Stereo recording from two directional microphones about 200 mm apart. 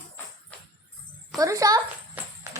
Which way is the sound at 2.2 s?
10° right (ahead or behind).